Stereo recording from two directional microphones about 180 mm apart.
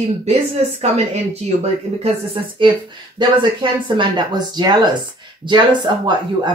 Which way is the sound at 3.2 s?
25° right (ahead or behind).